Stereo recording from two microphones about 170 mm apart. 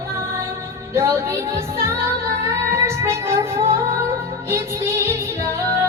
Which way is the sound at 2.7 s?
15° right (ahead or behind).